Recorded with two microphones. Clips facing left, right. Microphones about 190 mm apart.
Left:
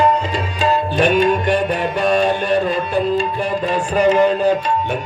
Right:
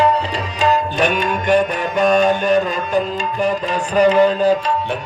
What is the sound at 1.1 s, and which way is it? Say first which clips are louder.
Music: left 6 dB; 40° left (ahead or behind).